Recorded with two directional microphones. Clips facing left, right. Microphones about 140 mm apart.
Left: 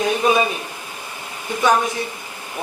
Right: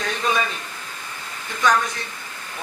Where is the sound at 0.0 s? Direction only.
15° left (ahead or behind).